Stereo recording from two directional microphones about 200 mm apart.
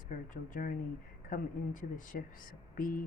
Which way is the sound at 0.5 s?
45° left (ahead or behind).